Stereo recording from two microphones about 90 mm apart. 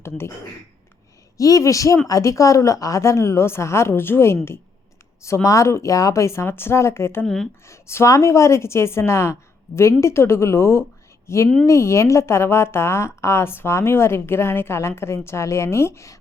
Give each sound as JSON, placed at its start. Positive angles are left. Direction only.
{"t": 1.4, "sound": "a woman's voice", "side_deg": 35}